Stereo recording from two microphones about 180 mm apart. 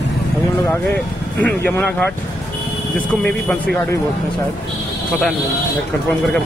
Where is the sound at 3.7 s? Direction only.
10° left (ahead or behind).